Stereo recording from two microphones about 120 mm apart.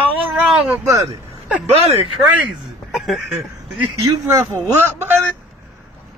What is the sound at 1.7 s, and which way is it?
Speech, 55° right (ahead or behind).